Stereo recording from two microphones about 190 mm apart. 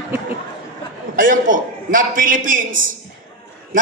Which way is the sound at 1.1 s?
45° right (ahead or behind).